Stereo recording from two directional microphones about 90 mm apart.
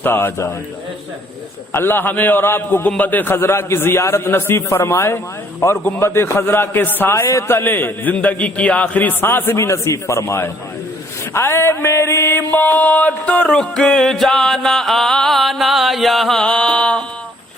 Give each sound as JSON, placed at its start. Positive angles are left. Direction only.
{"t": 0.0, "sound": "a man's voice", "side_deg": 25}
{"t": 1.7, "sound": "a man's voice", "side_deg": 25}
{"t": 11.3, "sound": "mantra", "side_deg": 30}